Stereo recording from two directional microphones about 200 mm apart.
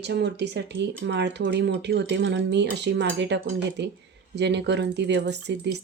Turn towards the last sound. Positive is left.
turn(degrees=-60)  # may be behind; listen again after turning